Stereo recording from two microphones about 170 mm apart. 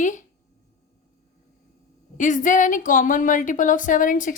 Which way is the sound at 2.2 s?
50° left (ahead or behind).